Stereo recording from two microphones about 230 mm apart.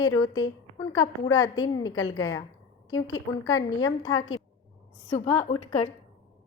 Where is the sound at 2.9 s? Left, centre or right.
Left.